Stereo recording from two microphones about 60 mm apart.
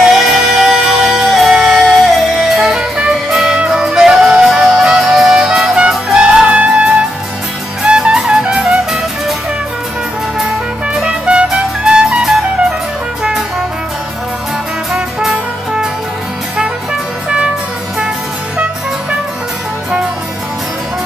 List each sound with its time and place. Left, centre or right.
0.0 s music: centre
5.3 s music: centre
10.9 s music: centre